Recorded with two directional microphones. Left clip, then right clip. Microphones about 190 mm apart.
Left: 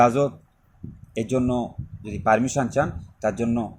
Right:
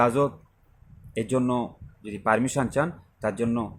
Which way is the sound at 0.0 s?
Centre (ahead or behind).